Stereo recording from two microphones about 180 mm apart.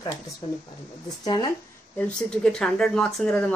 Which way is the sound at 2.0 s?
5° left (ahead or behind).